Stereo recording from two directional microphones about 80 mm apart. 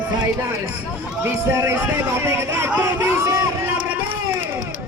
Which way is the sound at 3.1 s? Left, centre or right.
Right.